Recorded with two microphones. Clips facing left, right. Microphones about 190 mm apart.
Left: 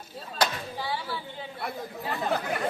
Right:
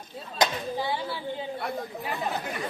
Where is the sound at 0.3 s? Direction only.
20° right (ahead or behind).